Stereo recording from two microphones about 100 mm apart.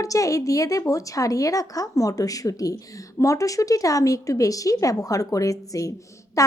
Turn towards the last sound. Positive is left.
turn(degrees=35)  # may be behind; listen again after turning